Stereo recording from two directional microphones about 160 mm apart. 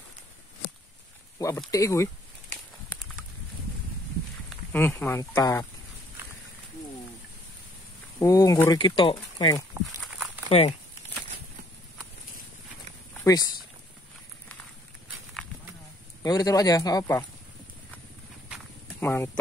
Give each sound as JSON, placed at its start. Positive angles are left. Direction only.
{"t": 1.7, "sound": "speech", "side_deg": 20}
{"t": 4.7, "sound": "speech", "side_deg": 15}
{"t": 8.2, "sound": "speech", "side_deg": 20}
{"t": 13.2, "sound": "speech", "side_deg": 20}
{"t": 16.2, "sound": "speech", "side_deg": 20}
{"t": 18.9, "sound": "speech", "side_deg": 15}